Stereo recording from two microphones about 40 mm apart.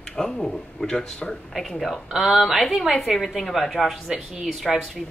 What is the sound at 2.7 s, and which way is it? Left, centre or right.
A woman's voice, centre.